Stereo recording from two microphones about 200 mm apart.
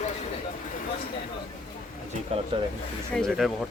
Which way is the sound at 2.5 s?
25° right (ahead or behind).